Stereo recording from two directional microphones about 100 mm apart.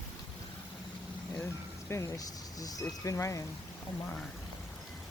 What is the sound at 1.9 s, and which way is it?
Speech, 35° left (ahead or behind).